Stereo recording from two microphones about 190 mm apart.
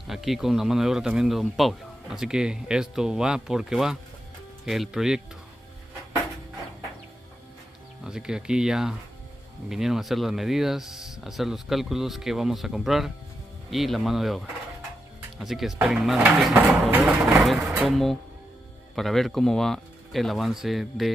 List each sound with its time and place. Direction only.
0.0 s speech: centre (ahead or behind)
8.0 s speech: 5° right (ahead or behind)